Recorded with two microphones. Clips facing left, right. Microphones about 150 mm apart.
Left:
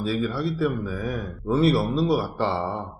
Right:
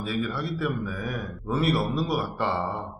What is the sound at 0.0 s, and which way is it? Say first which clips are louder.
Speech: left 4 dB; 30° left (ahead or behind).